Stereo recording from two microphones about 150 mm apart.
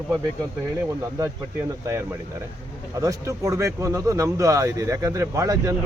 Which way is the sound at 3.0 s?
20° right (ahead or behind).